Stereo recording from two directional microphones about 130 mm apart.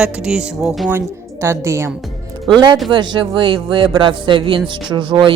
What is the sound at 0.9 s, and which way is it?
Speech, 20° right (ahead or behind).